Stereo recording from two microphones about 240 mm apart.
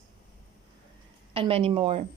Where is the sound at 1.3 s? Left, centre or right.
Right.